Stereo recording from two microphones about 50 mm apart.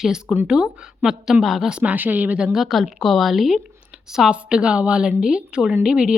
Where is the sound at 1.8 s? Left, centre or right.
Right.